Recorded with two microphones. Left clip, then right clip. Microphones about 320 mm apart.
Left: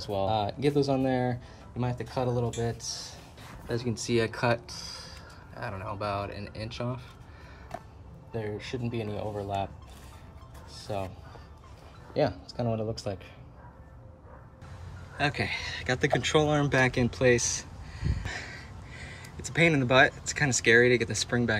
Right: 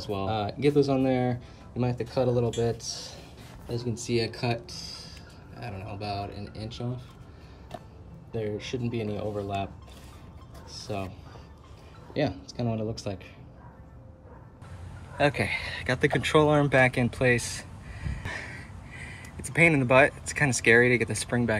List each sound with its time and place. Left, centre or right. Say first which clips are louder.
0.7 s speech: right 2 dB; centre
3.8 s speech: left 1 dB; left
4.1 s speech: left 2 dB; centre
7.7 s a sound: left 1 dB; centre
8.3 s speech: right 3 dB; centre
10.8 s speech: even; centre
15.1 s speech: right 4 dB; centre